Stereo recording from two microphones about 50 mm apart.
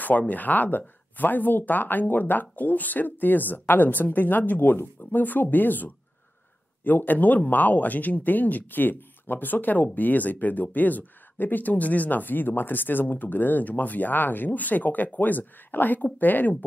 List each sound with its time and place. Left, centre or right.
0.3 s speech: left